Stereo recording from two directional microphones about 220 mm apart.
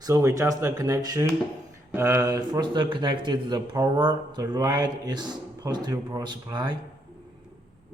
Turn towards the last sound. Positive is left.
turn(degrees=-20)  # may be behind; listen again after turning